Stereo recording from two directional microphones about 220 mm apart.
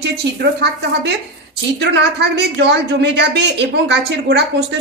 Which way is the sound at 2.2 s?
50° right (ahead or behind).